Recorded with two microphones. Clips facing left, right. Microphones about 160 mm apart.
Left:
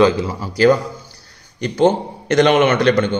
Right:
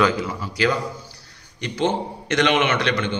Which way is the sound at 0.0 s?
30° left (ahead or behind).